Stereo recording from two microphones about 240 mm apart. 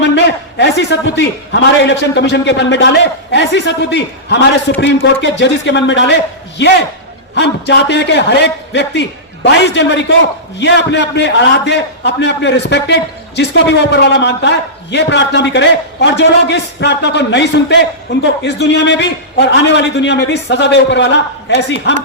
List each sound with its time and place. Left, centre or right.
0.0 s a man's voice: left